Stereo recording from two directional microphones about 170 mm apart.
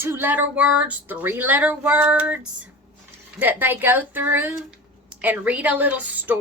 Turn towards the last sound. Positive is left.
turn(degrees=-10)  # may be behind; listen again after turning